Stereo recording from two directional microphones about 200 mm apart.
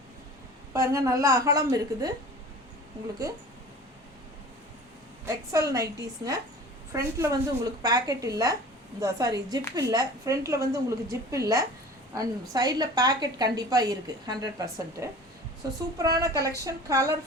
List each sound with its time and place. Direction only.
0.7 s a woman's voice: 15° right (ahead or behind)
5.2 s a woman's voice: 15° right (ahead or behind)